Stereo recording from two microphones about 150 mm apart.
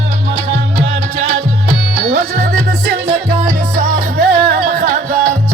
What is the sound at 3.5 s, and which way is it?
Music, 65° right (ahead or behind).